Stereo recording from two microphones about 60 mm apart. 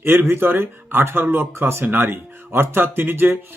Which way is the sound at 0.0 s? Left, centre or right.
Right.